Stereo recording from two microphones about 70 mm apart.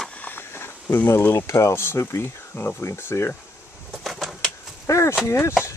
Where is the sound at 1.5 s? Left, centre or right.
Left.